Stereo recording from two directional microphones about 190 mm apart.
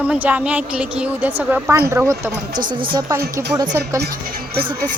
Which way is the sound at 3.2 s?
60° right (ahead or behind).